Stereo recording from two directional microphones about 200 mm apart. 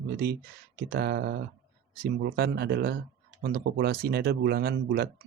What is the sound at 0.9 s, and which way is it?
Speech, 55° right (ahead or behind).